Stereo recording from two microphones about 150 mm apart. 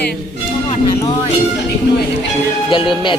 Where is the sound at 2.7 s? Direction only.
35° left (ahead or behind).